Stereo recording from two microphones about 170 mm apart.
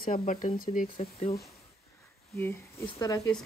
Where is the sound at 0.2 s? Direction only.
40° left (ahead or behind).